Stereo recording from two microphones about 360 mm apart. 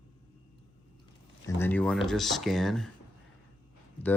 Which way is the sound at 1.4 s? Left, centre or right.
Centre.